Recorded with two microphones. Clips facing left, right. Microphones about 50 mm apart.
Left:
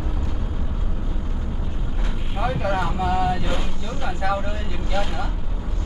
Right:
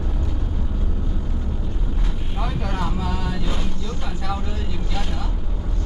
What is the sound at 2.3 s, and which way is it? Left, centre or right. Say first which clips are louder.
Vehicle: left 5 dB; centre.